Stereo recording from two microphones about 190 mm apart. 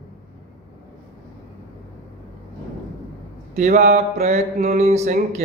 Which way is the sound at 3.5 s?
35° right (ahead or behind).